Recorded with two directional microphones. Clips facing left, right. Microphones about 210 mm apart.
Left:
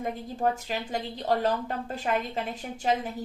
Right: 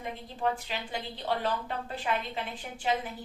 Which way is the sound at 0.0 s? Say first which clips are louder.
Left 4 dB; 40° left (ahead or behind).